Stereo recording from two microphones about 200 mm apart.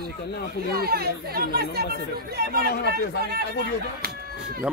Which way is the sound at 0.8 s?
50° right (ahead or behind).